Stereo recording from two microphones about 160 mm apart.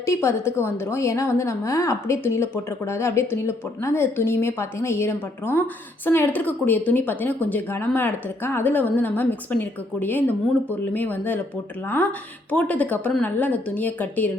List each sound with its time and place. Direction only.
0.0 s a woman's voice: 15° left (ahead or behind)
12.5 s a woman's voice: 10° left (ahead or behind)